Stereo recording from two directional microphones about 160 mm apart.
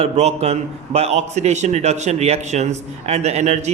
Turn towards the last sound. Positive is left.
turn(degrees=-45)  # may be behind; listen again after turning